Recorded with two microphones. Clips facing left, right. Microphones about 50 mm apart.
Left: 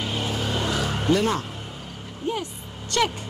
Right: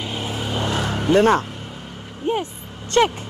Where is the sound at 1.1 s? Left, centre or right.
Right.